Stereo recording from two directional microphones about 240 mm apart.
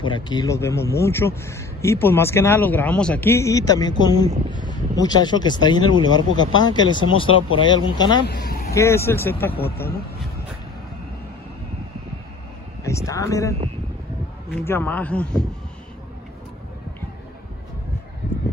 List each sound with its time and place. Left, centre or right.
0.0 s speech: centre
8.3 s vehicle: left
8.7 s speech: centre
12.8 s speech: centre